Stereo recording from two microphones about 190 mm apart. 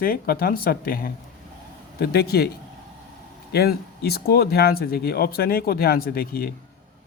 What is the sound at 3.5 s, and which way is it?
Speech, 55° left (ahead or behind).